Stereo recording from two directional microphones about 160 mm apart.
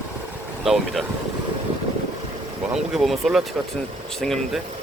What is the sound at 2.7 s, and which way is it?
Speech, centre (ahead or behind).